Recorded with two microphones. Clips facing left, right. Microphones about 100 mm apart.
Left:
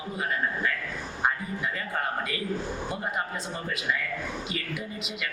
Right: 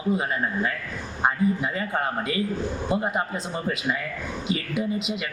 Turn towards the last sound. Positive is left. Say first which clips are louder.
# right 8 dB
turn(degrees=-20)  # may be behind; listen again after turning